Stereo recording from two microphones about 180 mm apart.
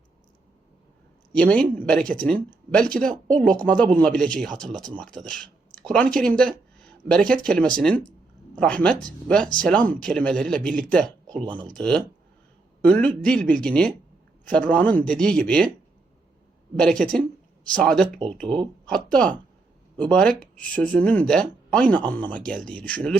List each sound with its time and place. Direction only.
1.3 s speech: 5° left (ahead or behind)
16.7 s speech: 5° left (ahead or behind)